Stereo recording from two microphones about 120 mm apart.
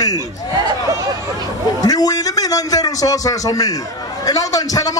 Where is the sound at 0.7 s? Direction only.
30° right (ahead or behind).